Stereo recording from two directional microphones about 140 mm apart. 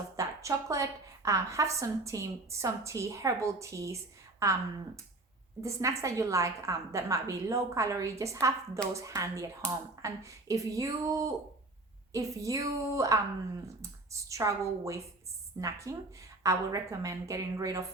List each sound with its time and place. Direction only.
0.2 s a woman's voice: 20° right (ahead or behind)
5.6 s a woman's voice: 20° right (ahead or behind)